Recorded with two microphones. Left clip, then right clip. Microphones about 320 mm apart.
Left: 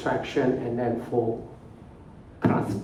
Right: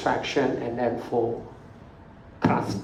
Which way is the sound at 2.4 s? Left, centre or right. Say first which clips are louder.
Right 2 dB; right.